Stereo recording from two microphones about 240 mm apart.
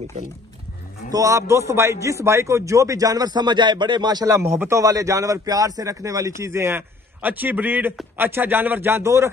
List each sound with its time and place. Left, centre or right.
1.1 s a man's voice: centre